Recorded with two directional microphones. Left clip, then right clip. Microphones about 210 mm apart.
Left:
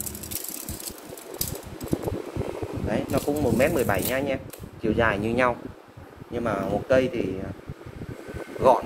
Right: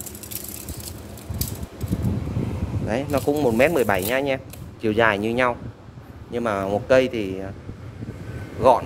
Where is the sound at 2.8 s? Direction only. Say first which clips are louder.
Right 4 dB; 30° right (ahead or behind).